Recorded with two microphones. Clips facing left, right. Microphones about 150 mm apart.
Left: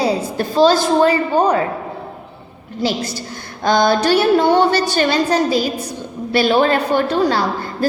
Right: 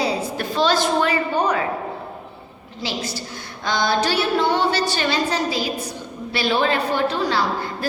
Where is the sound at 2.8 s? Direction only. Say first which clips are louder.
Left 7 dB; 45° left (ahead or behind).